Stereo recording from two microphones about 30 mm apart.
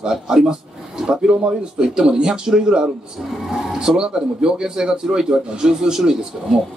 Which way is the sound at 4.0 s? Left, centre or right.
Right.